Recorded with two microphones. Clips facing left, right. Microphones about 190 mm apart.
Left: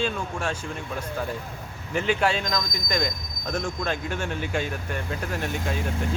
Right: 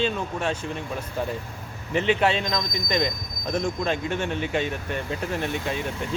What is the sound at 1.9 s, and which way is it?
Speech, centre (ahead or behind).